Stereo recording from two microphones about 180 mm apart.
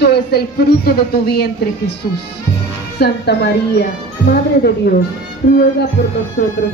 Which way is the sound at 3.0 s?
65° left (ahead or behind).